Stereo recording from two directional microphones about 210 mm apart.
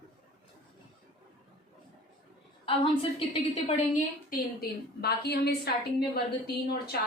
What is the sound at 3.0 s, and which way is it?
Speech, 25° left (ahead or behind).